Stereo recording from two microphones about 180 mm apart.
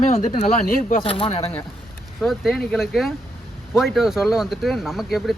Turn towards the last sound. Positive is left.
turn(degrees=0)  # may be behind; listen again after turning